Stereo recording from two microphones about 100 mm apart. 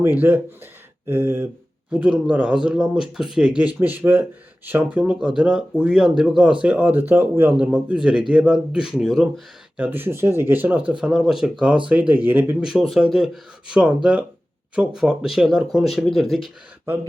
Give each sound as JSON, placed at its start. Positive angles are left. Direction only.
{"t": 0.2, "sound": "speech", "side_deg": -20}
{"t": 3.8, "sound": "speech", "side_deg": -20}
{"t": 9.7, "sound": "speech", "side_deg": -20}
{"t": 11.0, "sound": "speech", "side_deg": -5}
{"t": 12.6, "sound": "speech", "side_deg": -5}